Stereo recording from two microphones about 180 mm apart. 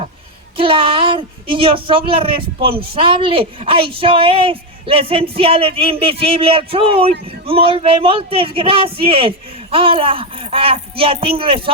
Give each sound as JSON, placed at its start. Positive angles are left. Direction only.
{"t": 0.5, "sound": "a woman's voice", "side_deg": -30}